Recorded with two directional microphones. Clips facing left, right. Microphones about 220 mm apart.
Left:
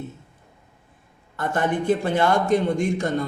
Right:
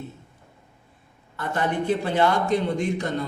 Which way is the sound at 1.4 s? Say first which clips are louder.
Left 2 dB; 50° left (ahead or behind).